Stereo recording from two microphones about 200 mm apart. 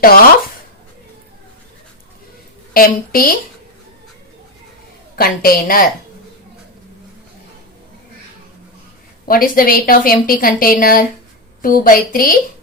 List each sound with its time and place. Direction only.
0.0 s speech: 45° left (ahead or behind)
2.7 s a woman's voice: 45° left (ahead or behind)
5.1 s a woman's voice: 45° left (ahead or behind)
9.2 s a woman's voice: 45° left (ahead or behind)